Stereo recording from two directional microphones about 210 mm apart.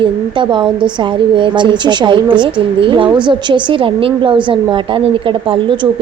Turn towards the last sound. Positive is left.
turn(degrees=-25)  # may be behind; listen again after turning